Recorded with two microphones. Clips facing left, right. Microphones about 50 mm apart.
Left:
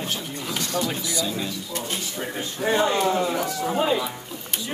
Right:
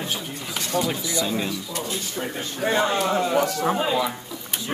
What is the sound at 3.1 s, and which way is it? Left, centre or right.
Speech, right.